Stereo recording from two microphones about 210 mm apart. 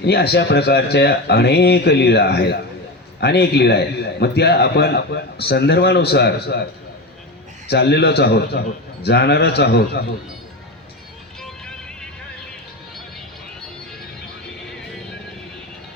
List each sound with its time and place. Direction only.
0.0 s a man's voice: 50° left (ahead or behind)
7.7 s a man's voice: 50° left (ahead or behind)
11.3 s music: 5° left (ahead or behind)